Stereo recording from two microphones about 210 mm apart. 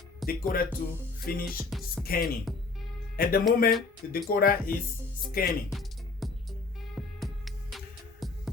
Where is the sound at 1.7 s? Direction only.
Centre (ahead or behind).